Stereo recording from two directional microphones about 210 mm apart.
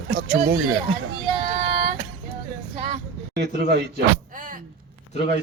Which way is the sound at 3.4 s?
50° right (ahead or behind).